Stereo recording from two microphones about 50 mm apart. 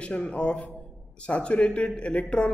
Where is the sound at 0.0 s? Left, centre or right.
Left.